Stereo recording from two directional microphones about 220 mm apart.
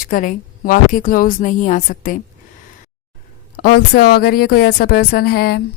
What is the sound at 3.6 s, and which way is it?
A woman's voice, 45° left (ahead or behind).